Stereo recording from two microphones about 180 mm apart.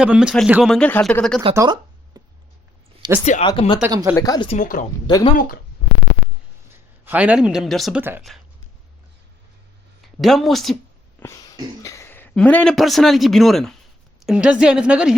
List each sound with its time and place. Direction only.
0.0 s speech: 5° right (ahead or behind)
1.5 s a sound: 20° right (ahead or behind)
3.0 s speech: 25° right (ahead or behind)
3.4 s speech: 25° left (ahead or behind)
4.4 s speech: 45° left (ahead or behind)
5.0 s speech: 25° left (ahead or behind)
6.7 s a man's voice: 10° right (ahead or behind)
10.2 s speech: centre (ahead or behind)
11.2 s a sound: 20° left (ahead or behind)
11.8 s a man's voice: 15° left (ahead or behind); by 15.1 s 5° right (ahead or behind)